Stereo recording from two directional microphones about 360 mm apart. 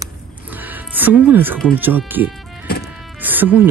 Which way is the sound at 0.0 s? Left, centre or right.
Centre.